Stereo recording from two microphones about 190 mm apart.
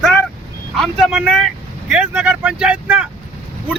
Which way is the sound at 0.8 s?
Centre (ahead or behind).